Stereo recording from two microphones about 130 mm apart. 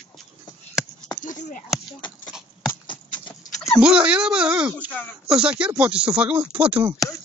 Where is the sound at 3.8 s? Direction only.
10° right (ahead or behind).